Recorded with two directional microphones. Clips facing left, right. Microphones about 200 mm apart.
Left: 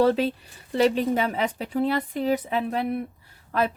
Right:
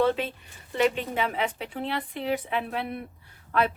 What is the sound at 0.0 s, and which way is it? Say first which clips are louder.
Speech: left 4 dB; 40° left (ahead or behind).